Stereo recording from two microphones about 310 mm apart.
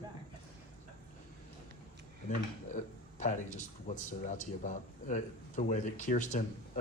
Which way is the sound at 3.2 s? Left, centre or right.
Left.